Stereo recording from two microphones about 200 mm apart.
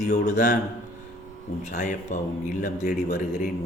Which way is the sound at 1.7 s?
40° left (ahead or behind).